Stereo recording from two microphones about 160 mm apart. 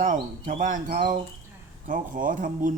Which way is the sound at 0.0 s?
55° right (ahead or behind).